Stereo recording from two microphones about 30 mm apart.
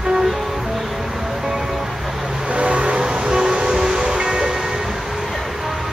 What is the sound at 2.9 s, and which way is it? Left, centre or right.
Music, right.